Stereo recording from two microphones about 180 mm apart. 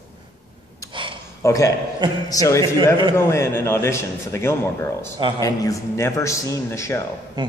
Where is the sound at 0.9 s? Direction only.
25° right (ahead or behind).